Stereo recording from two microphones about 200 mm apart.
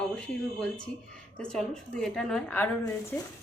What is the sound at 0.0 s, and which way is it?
A woman's voice, 5° left (ahead or behind).